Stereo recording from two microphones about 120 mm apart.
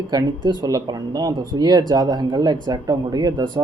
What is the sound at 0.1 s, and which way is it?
Speech, 35° right (ahead or behind).